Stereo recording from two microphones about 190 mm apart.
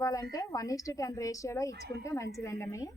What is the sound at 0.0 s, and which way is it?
A woman's voice, 20° left (ahead or behind).